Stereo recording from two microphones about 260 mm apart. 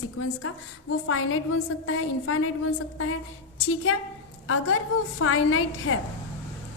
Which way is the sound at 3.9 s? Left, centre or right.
Left.